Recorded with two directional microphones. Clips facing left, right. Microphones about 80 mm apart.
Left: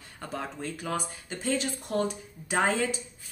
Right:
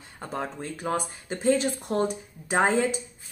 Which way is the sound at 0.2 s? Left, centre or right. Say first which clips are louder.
Right 3 dB; right.